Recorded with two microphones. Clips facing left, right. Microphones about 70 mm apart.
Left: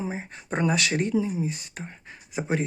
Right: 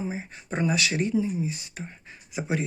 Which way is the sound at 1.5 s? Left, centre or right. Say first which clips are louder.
Left 1 dB; left.